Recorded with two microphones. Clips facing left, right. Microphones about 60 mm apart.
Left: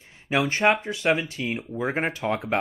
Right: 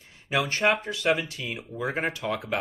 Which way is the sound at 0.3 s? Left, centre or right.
Left.